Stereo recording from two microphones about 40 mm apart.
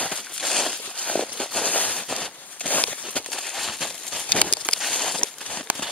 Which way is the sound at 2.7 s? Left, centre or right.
Left.